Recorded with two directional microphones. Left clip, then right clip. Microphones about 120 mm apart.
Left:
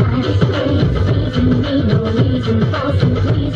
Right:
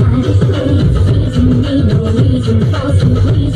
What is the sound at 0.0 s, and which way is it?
Music, 20° right (ahead or behind).